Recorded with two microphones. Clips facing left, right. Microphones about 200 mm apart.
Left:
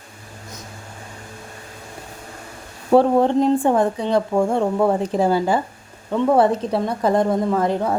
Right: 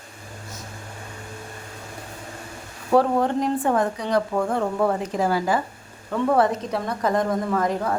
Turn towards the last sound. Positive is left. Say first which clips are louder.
# left 4 dB
turn(degrees=25)  # may be behind; listen again after turning